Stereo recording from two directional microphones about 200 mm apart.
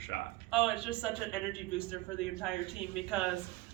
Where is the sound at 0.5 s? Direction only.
5° right (ahead or behind).